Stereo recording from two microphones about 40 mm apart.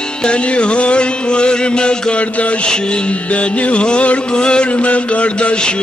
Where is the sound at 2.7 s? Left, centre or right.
Left.